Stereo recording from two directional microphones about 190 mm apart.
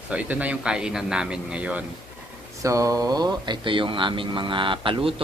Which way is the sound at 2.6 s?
15° right (ahead or behind).